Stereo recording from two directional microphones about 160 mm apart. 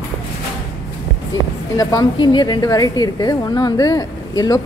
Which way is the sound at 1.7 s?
25° left (ahead or behind).